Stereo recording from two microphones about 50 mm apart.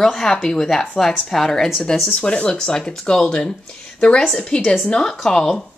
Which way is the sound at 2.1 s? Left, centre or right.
Centre.